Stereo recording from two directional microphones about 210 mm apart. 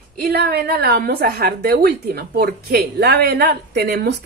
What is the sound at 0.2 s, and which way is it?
Speech, 50° right (ahead or behind).